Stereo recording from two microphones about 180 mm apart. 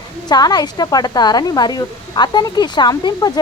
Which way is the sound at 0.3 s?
20° left (ahead or behind).